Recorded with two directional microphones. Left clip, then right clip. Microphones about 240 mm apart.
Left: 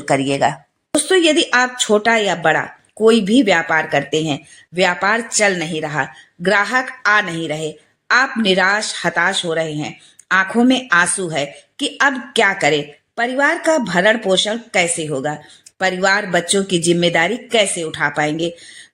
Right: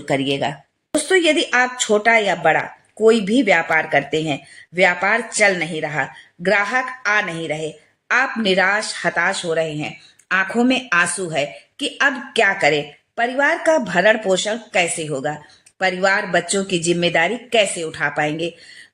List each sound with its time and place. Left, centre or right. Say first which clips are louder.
0.0 s speech: left 4 dB; centre
1.0 s speech: left 2 dB; centre